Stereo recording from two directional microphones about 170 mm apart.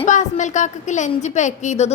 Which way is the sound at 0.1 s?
45° left (ahead or behind).